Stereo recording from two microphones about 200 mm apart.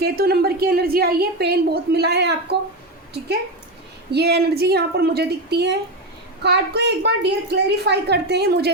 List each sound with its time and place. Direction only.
0.0 s a woman's voice: 50° right (ahead or behind)
4.1 s a woman's voice: 55° right (ahead or behind)